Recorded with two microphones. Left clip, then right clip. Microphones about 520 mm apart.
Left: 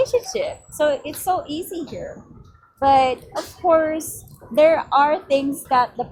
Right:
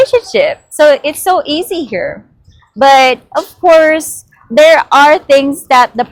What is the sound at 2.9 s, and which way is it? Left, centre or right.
Speech, right.